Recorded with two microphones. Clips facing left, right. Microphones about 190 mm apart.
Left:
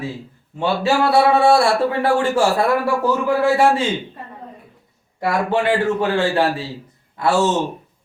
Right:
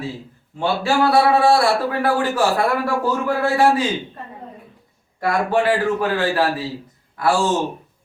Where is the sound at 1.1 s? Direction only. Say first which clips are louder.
Left 2 dB; 25° left (ahead or behind).